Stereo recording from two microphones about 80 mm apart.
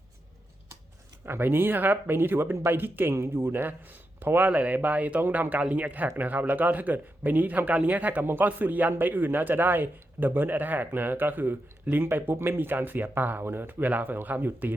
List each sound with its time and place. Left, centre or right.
1.2 s speech: right